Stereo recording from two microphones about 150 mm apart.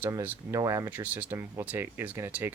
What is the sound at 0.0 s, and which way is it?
Speech, 15° right (ahead or behind).